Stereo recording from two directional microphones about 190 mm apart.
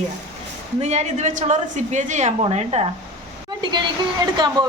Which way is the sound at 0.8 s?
35° right (ahead or behind).